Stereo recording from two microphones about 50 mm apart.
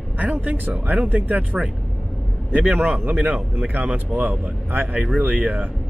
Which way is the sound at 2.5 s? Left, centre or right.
Right.